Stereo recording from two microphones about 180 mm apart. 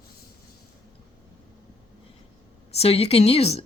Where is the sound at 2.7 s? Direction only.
35° left (ahead or behind).